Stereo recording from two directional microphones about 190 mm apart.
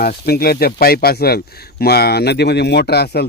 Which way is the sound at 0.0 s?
50° left (ahead or behind).